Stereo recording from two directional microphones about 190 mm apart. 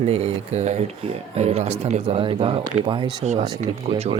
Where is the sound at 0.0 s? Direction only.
35° right (ahead or behind).